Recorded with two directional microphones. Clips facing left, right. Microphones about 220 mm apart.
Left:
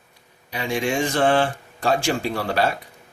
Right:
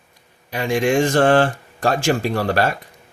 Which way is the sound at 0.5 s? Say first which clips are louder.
Right 6 dB; 50° right (ahead or behind).